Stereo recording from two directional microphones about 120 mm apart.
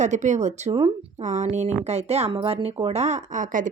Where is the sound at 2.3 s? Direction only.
45° right (ahead or behind).